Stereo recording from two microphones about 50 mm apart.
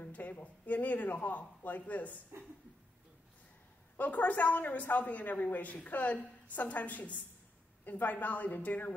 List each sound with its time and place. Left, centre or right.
0.0 s speech: left
4.0 s speech: left